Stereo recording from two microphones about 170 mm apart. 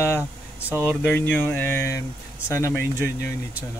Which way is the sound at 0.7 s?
10° right (ahead or behind).